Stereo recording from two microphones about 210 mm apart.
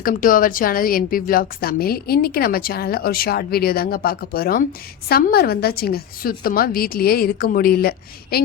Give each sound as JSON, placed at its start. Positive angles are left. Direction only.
{"t": 0.0, "sound": "a woman's voice", "side_deg": 40}